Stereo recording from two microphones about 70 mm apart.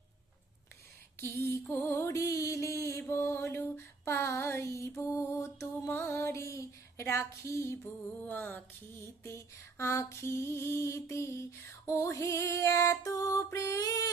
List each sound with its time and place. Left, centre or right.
1.2 s music: left
1.7 s female singing: left
3.1 s mantra: left
4.0 s music: left
5.9 s a sound: left
8.3 s music: left
9.2 s music: left
11.9 s female singing: left